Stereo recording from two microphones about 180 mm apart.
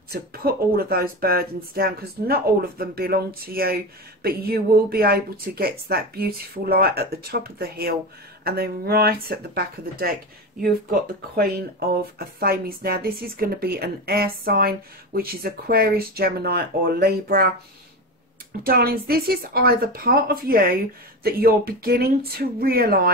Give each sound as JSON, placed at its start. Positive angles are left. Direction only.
{"t": 0.1, "sound": "speech", "side_deg": -60}
{"t": 18.6, "sound": "speech", "side_deg": -55}